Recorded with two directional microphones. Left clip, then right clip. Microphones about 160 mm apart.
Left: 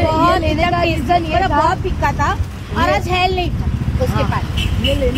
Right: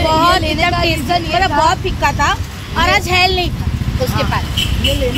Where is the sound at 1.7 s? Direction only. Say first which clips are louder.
Right 3 dB; 10° right (ahead or behind).